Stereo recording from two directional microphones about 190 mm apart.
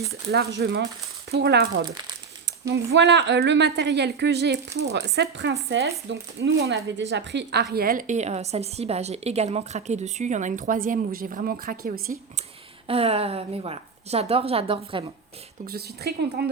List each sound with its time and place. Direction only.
0.3 s a woman's voice: 55° right (ahead or behind)
12.9 s a woman's voice: 30° right (ahead or behind)
15.6 s a woman's voice: 55° right (ahead or behind)